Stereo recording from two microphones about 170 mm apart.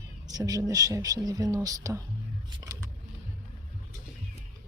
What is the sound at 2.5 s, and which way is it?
Vehicle, 20° right (ahead or behind).